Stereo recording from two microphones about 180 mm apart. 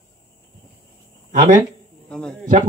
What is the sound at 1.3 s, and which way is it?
Speech, 45° right (ahead or behind).